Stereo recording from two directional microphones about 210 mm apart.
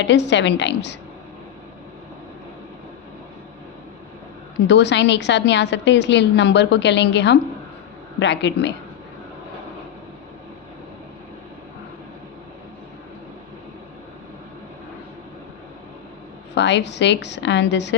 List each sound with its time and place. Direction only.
0.0 s a woman's voice: 55° left (ahead or behind)
4.6 s a woman's voice: 55° left (ahead or behind)
16.6 s a woman's voice: 55° left (ahead or behind)